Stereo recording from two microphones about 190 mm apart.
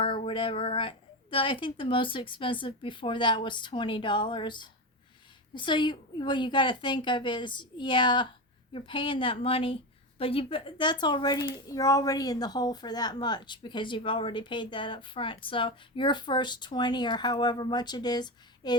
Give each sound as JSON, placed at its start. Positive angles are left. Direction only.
{"t": 0.0, "sound": "speech", "side_deg": 25}